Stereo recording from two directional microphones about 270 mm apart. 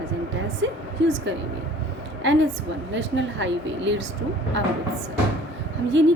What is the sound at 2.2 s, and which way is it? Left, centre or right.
A woman's voice, right.